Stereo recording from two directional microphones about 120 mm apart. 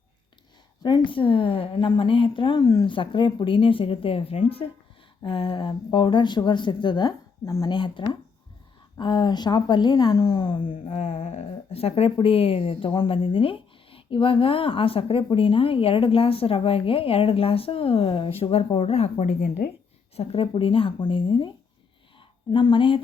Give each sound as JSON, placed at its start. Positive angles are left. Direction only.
{"t": 0.8, "sound": "speech", "side_deg": 35}
{"t": 2.9, "sound": "a woman's voice", "side_deg": 45}
{"t": 20.1, "sound": "speech", "side_deg": 50}
{"t": 22.5, "sound": "speech", "side_deg": 40}